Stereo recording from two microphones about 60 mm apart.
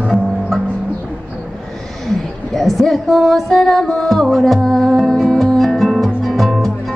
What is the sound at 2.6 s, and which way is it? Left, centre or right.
Music, centre.